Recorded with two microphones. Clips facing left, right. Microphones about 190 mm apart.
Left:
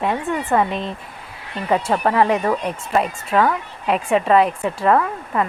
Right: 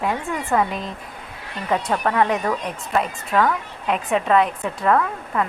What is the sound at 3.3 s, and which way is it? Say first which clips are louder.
Speech: left 1 dB; 20° left (ahead or behind).